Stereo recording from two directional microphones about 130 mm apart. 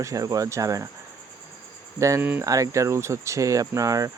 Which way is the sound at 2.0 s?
25° right (ahead or behind).